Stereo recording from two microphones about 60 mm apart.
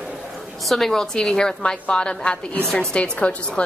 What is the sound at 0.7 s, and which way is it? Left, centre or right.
A woman's voice, centre.